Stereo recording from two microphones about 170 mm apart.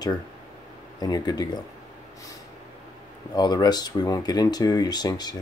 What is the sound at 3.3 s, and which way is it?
Speech, 25° left (ahead or behind).